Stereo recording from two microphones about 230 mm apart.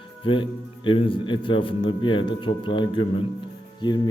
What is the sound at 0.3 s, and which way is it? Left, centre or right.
Speech, left.